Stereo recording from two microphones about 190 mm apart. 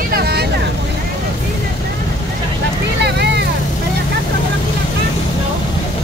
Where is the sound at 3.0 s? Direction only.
60° right (ahead or behind).